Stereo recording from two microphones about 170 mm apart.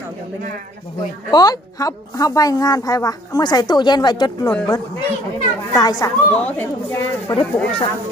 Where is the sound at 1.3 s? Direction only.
25° left (ahead or behind).